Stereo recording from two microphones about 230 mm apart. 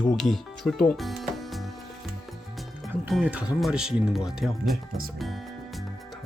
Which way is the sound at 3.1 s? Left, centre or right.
Centre.